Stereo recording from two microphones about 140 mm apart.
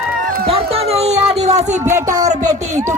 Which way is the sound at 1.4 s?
55° right (ahead or behind).